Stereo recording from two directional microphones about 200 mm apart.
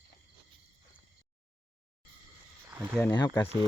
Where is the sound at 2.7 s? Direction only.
5° right (ahead or behind).